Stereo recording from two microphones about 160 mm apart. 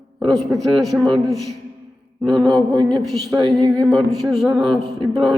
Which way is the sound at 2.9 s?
Centre (ahead or behind).